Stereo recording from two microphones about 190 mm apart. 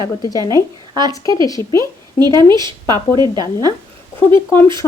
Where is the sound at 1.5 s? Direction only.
15° left (ahead or behind).